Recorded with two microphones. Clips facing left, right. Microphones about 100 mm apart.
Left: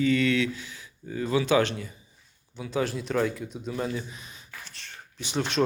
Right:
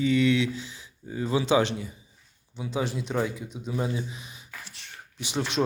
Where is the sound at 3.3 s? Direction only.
10° right (ahead or behind).